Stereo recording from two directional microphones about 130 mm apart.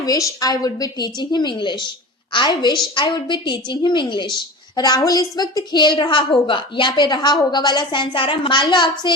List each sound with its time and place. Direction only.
0.0 s a woman's voice: 25° left (ahead or behind)